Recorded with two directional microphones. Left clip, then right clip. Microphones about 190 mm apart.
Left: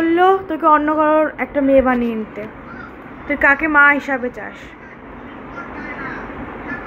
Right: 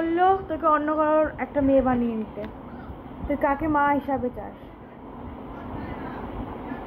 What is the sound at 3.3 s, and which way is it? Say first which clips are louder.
Speech: left 9 dB; centre (ahead or behind).